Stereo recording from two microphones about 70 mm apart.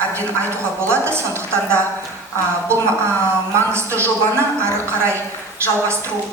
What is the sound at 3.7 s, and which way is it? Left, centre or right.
A man's voice, right.